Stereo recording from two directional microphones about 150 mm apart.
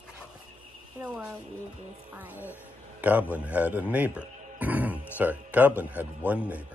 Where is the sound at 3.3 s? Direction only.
10° right (ahead or behind).